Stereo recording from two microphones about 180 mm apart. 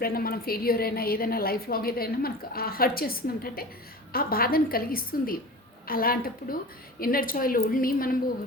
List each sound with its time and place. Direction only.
0.0 s a woman's voice: 55° left (ahead or behind)